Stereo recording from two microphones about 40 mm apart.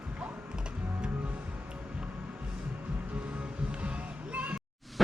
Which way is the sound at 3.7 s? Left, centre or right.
Right.